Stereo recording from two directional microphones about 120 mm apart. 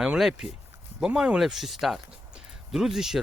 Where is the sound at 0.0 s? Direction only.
5° right (ahead or behind).